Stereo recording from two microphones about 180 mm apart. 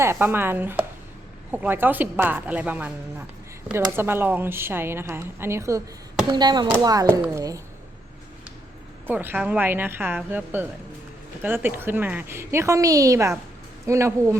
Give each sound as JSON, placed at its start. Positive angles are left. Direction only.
{"t": 0.0, "sound": "speech", "side_deg": -15}
{"t": 9.0, "sound": "speech", "side_deg": -10}